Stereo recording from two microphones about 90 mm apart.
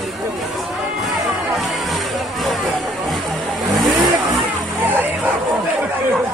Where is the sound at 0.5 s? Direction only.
Centre (ahead or behind).